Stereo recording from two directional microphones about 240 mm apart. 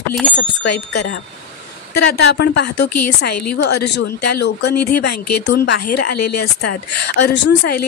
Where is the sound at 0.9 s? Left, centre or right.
Left.